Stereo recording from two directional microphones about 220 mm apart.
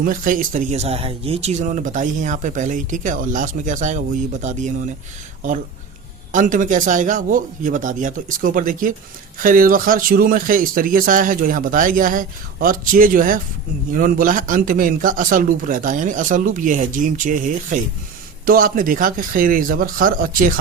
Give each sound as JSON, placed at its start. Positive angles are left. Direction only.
{"t": 0.0, "sound": "speech", "side_deg": -40}
{"t": 6.3, "sound": "speech", "side_deg": -35}